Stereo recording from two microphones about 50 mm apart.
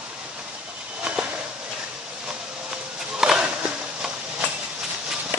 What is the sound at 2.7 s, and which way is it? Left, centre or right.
Run, centre.